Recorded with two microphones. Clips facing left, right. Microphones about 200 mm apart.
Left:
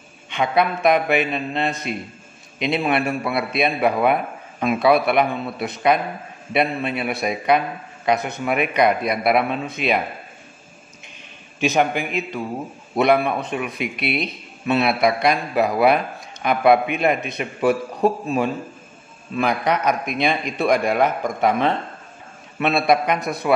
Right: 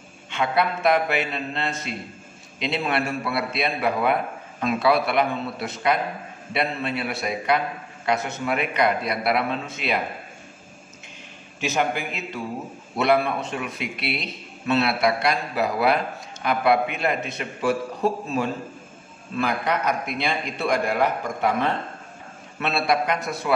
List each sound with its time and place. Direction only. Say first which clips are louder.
0.3 s a man's voice: left 3 dB; 15° left (ahead or behind)
11.6 s a man's voice: left 5 dB; 20° left (ahead or behind)